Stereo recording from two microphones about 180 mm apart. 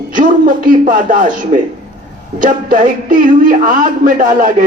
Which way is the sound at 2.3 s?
50° right (ahead or behind).